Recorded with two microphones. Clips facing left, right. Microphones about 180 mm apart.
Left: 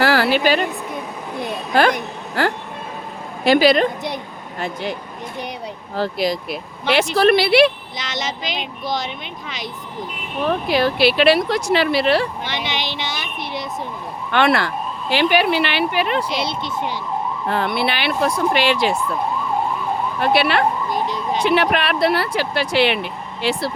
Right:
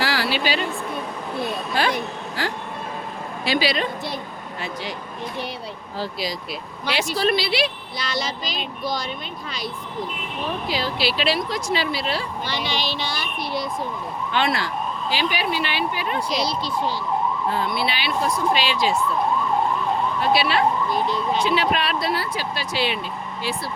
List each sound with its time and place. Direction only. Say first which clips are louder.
0.0 s a sound: left 7 dB; 50° left (ahead or behind)
1.7 s a woman's voice: left 8 dB; 55° left (ahead or behind)
3.4 s a woman's voice: left 9 dB; 50° left (ahead or behind)
6.0 s speech: left 8 dB; 55° left (ahead or behind)
10.4 s speech: left 8 dB; 60° left (ahead or behind)
12.5 s speech: left 1 dB; 20° left (ahead or behind)
14.3 s speech: left 6 dB; 65° left (ahead or behind)
16.4 s speech: even; 25° left (ahead or behind)
17.5 s speech: left 4 dB; 70° left (ahead or behind)
20.1 s speech: left 4 dB; 60° left (ahead or behind)